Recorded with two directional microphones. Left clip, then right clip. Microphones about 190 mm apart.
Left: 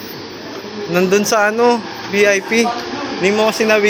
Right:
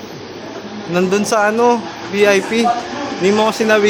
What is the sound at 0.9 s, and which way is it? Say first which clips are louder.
A man's voice: left 1 dB; 5° right (ahead or behind).